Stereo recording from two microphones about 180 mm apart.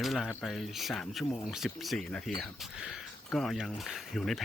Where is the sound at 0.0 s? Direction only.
Centre (ahead or behind).